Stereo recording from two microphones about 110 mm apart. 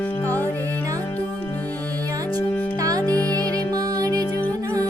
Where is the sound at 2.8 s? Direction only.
35° right (ahead or behind).